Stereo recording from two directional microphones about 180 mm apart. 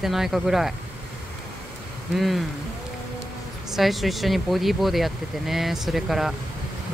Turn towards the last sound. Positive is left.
turn(degrees=0)  # may be behind; listen again after turning